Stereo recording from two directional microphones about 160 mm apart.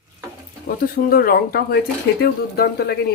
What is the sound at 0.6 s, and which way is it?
A woman's voice, 65° left (ahead or behind).